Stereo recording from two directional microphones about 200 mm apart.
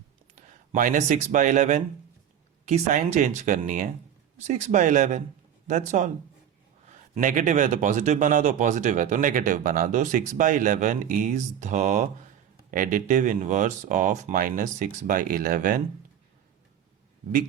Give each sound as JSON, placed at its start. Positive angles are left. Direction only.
{"t": 0.7, "sound": "speech", "side_deg": -40}